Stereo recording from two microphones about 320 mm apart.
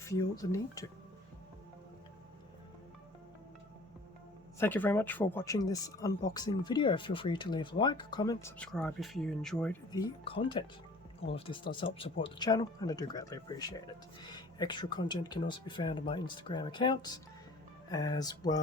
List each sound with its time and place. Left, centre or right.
0.0 s speech: centre
4.6 s speech: centre